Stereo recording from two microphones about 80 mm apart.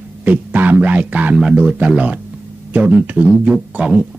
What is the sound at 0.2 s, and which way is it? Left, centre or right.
Speech, right.